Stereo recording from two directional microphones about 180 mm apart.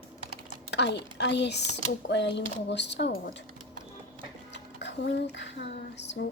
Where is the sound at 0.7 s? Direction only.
70° left (ahead or behind).